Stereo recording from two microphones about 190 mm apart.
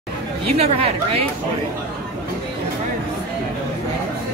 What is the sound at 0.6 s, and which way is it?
Speech, 30° right (ahead or behind).